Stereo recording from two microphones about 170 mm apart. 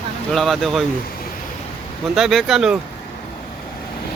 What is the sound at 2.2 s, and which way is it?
Speech, centre (ahead or behind).